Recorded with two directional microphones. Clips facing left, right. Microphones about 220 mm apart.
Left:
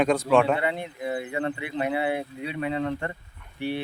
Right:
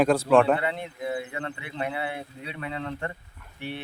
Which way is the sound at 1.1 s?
15° left (ahead or behind).